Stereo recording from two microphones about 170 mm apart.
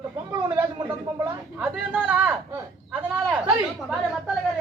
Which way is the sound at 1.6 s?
10° right (ahead or behind).